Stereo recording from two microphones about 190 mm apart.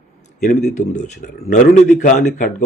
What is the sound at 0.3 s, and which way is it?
A man's voice, 45° left (ahead or behind).